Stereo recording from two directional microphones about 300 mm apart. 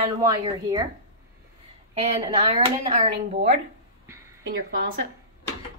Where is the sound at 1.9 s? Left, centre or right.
Centre.